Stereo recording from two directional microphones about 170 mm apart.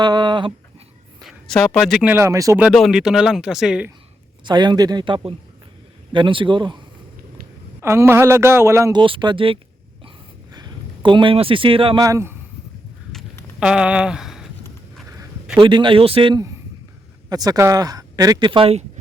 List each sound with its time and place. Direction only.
0.0 s speech: 25° right (ahead or behind)
1.2 s speech: centre (ahead or behind); by 2.6 s 20° right (ahead or behind)
2.6 s speech: centre (ahead or behind)
4.4 s speech: 25° right (ahead or behind)
7.8 s a man's voice: 15° right (ahead or behind); by 12.0 s 30° right (ahead or behind)
12.0 s a man's voice: 15° right (ahead or behind)
13.6 s speech: 5° right (ahead or behind)
15.5 s speech: 30° right (ahead or behind)